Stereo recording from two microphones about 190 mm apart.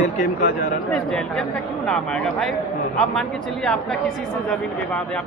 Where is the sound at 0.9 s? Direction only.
5° left (ahead or behind).